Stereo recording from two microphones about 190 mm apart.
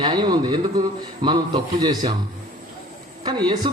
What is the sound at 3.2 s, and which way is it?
Speech, 20° right (ahead or behind).